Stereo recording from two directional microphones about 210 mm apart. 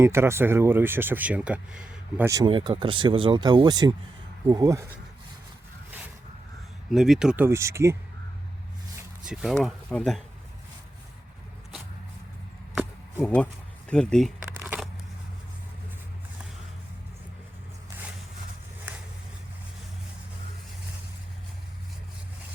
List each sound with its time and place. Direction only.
0.0 s speech: 10° right (ahead or behind)
6.9 s speech: centre (ahead or behind)
9.2 s speech: centre (ahead or behind)
13.1 s speech: 5° left (ahead or behind)
14.6 s a sound: 10° right (ahead or behind)